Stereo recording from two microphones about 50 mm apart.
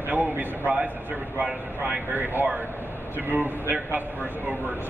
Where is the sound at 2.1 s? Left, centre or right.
Right.